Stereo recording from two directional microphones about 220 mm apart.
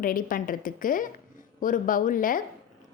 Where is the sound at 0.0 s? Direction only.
40° left (ahead or behind).